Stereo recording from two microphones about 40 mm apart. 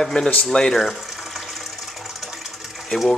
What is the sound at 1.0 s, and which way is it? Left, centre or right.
Water, centre.